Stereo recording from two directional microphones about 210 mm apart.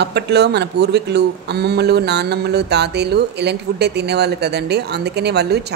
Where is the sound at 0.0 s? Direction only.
55° right (ahead or behind).